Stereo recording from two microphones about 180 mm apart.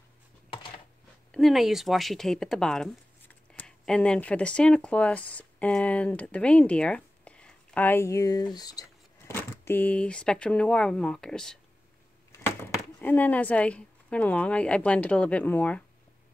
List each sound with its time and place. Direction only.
1.3 s speech: centre (ahead or behind)
13.0 s a woman's voice: 10° left (ahead or behind)